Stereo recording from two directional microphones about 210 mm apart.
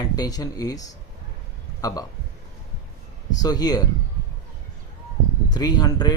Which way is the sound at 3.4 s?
20° left (ahead or behind).